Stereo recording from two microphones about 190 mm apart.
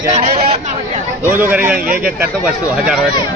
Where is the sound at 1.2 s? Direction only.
10° right (ahead or behind).